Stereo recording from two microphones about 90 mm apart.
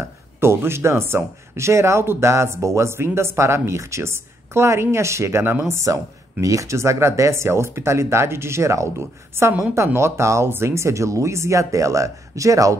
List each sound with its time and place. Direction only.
0.0 s speech: 30° right (ahead or behind)